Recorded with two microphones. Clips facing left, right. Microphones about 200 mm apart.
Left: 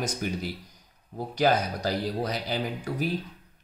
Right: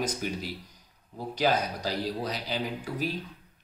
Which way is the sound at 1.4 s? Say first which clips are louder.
Left 3 dB; 50° left (ahead or behind).